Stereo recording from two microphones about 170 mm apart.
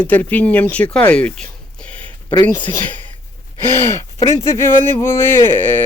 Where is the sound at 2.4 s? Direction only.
10° left (ahead or behind).